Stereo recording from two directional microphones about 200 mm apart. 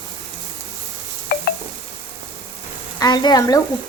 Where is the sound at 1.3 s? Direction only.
50° left (ahead or behind).